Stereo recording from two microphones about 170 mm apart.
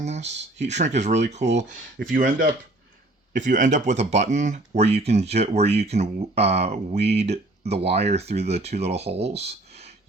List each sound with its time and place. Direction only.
0.0 s speech: 40° right (ahead or behind)